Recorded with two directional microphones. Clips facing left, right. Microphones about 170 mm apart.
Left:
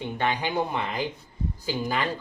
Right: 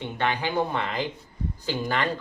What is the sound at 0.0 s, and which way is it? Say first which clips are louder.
Speech: even; 15° left (ahead or behind).